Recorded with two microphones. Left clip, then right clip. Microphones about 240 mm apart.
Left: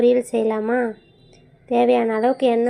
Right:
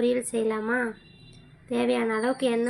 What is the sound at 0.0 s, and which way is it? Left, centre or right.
Speech, centre.